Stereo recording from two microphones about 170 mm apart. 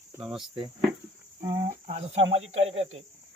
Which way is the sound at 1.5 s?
30° right (ahead or behind).